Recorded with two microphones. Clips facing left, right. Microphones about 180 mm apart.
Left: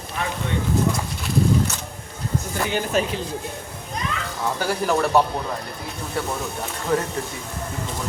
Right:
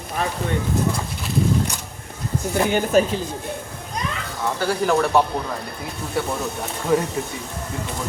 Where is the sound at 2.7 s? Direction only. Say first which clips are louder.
Right 5 dB; 50° right (ahead or behind).